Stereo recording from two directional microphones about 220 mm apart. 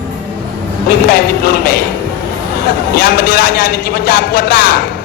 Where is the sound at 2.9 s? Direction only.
45° left (ahead or behind).